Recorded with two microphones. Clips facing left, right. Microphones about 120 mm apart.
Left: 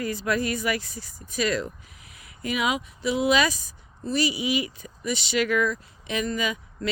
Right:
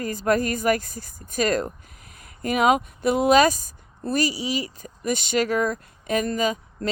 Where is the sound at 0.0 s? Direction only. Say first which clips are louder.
Right 4 dB; 45° right (ahead or behind).